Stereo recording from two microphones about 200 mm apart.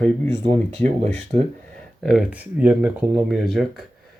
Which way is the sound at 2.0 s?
Centre (ahead or behind).